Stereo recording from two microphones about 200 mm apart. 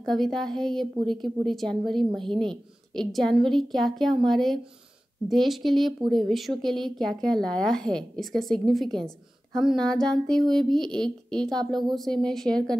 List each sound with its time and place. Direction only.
0.0 s a woman's voice: centre (ahead or behind)
11.5 s speech: 20° right (ahead or behind)
12.0 s a woman's voice: 5° left (ahead or behind)